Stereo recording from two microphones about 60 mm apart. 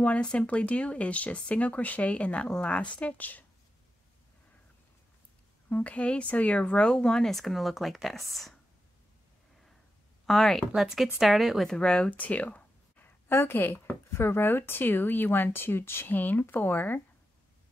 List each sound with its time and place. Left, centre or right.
0.0 s speech: centre
5.7 s speech: left; by 8.5 s centre
10.2 s speech: centre
11.6 s speech: centre
12.2 s a sound: left
13.3 s speech: left